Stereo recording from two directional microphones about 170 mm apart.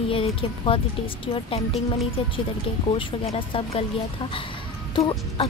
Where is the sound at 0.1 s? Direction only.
30° left (ahead or behind).